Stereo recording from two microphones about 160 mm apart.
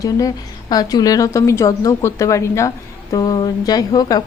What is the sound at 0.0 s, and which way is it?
A woman's voice, 20° left (ahead or behind).